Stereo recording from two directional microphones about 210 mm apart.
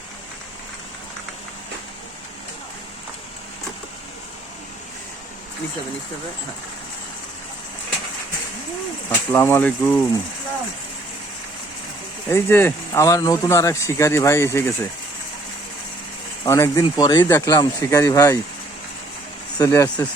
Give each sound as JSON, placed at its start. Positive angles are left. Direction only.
{"t": 9.0, "sound": "speech", "side_deg": 10}
{"t": 12.3, "sound": "speech", "side_deg": 10}
{"t": 16.5, "sound": "speech", "side_deg": 15}
{"t": 19.5, "sound": "speech", "side_deg": 15}